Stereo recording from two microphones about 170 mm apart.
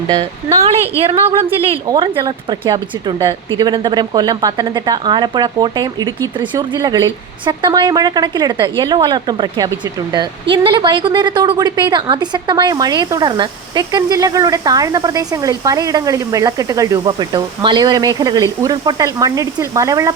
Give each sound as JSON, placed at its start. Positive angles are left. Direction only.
{"t": 0.6, "sound": "a woman's voice", "side_deg": -35}